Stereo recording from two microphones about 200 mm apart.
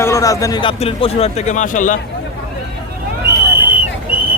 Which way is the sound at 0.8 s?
30° left (ahead or behind).